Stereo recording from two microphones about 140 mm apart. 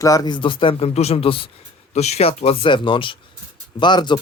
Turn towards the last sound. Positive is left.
turn(degrees=30)  # may be behind; listen again after turning